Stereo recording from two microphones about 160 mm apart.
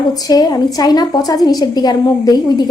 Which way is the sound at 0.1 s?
25° left (ahead or behind).